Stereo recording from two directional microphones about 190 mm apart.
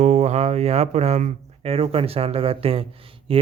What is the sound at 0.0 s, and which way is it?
Speech, 35° right (ahead or behind).